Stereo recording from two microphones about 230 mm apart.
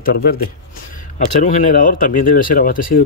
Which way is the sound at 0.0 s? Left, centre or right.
Left.